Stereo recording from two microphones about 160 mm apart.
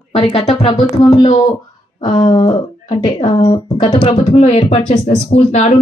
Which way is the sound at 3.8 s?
35° left (ahead or behind).